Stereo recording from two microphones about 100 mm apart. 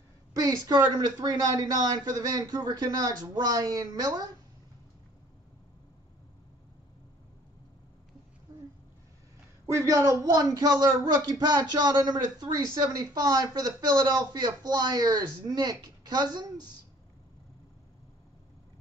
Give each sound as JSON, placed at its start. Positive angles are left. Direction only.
{"t": 0.3, "sound": "speech", "side_deg": -35}
{"t": 9.8, "sound": "speech", "side_deg": -30}